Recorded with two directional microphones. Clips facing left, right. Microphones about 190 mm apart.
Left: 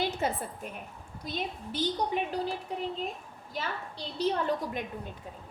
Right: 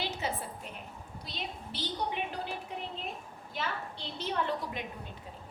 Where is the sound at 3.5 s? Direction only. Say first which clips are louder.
Left 1 dB; 40° left (ahead or behind).